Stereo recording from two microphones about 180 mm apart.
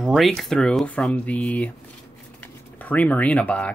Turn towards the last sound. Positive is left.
turn(degrees=5)  # may be behind; listen again after turning